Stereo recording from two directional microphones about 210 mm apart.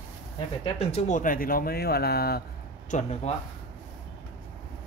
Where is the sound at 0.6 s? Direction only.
30° left (ahead or behind); by 2.4 s 50° left (ahead or behind).